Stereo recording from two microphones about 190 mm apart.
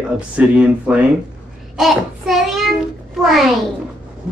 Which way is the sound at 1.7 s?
Centre (ahead or behind).